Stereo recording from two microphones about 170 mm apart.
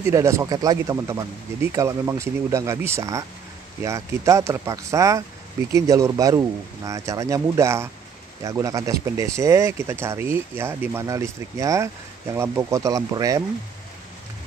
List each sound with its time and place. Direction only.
0.0 s speech: 15° right (ahead or behind)